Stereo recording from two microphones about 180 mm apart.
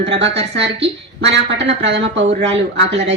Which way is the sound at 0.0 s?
75° right (ahead or behind).